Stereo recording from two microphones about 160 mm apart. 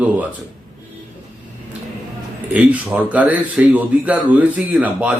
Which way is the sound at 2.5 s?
10° right (ahead or behind).